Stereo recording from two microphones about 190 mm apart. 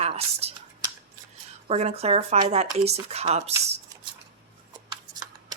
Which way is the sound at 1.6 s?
35° right (ahead or behind).